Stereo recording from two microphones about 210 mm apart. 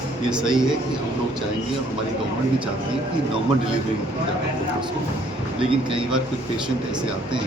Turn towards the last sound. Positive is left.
turn(degrees=-25)  # may be behind; listen again after turning